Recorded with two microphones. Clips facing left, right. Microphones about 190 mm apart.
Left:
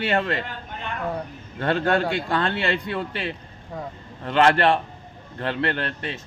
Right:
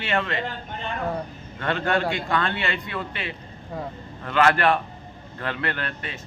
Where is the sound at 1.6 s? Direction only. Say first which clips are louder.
Left 2 dB; 35° left (ahead or behind).